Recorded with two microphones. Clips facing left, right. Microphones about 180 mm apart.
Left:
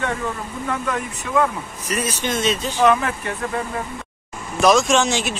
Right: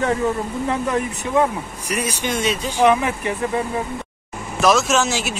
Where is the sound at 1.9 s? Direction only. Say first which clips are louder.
Even; 10° right (ahead or behind).